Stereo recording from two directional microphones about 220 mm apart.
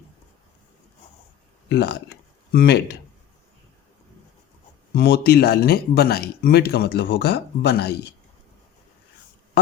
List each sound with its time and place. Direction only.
1.7 s speech: 50° left (ahead or behind)
4.9 s speech: 45° left (ahead or behind)